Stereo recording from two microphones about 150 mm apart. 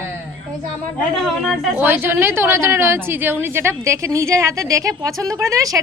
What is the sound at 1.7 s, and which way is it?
A woman's voice, 15° right (ahead or behind).